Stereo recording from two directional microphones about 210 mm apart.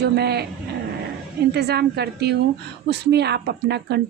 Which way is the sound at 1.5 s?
50° right (ahead or behind).